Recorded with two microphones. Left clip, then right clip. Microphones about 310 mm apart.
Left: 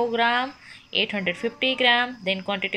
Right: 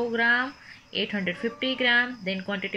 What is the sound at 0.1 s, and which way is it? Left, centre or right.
Speech, left.